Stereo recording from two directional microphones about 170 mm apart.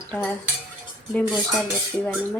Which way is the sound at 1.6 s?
10° left (ahead or behind).